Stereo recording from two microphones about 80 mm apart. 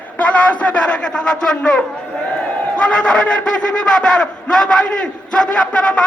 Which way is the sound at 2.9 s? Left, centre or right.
Centre.